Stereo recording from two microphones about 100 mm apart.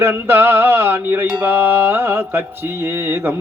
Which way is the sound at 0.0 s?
20° right (ahead or behind).